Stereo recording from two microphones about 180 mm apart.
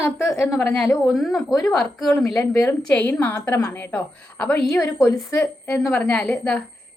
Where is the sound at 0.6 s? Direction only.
5° left (ahead or behind).